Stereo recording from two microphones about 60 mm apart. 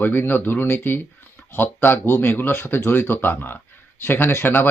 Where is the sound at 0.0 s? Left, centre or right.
Left.